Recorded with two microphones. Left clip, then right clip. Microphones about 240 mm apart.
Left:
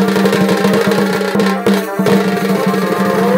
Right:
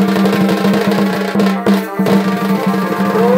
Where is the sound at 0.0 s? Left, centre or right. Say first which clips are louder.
Left 1 dB; centre.